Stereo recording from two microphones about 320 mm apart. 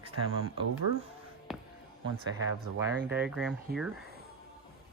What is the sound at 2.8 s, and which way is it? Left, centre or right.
Speech, centre.